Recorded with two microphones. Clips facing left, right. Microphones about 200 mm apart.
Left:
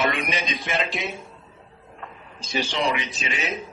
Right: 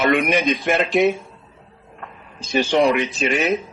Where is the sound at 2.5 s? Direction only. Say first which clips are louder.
Right 9 dB; 55° right (ahead or behind).